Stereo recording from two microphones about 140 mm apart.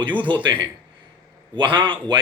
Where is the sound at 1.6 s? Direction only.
35° right (ahead or behind).